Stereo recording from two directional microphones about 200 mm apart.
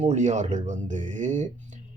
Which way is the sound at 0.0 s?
35° right (ahead or behind).